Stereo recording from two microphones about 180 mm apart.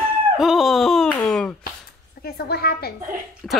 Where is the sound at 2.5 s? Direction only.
60° left (ahead or behind).